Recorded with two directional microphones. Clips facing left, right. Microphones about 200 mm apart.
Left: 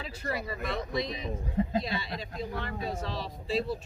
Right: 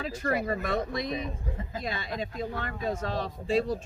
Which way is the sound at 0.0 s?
50° right (ahead or behind).